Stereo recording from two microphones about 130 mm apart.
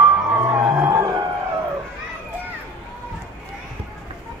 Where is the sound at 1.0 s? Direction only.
35° right (ahead or behind).